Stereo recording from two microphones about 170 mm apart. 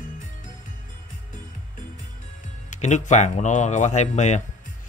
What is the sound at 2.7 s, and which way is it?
A man's voice, 45° left (ahead or behind).